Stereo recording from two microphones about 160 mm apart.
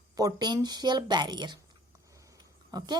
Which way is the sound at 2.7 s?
25° right (ahead or behind).